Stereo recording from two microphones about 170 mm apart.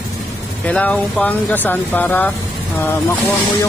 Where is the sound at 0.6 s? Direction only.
10° left (ahead or behind).